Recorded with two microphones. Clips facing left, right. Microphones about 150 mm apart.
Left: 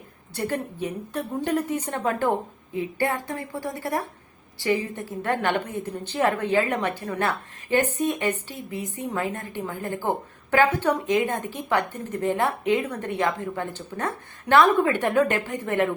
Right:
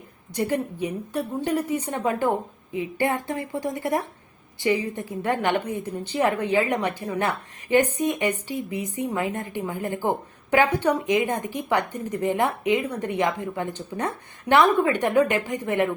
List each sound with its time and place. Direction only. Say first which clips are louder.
0.3 s a woman's voice: right 3 dB; 15° right (ahead or behind)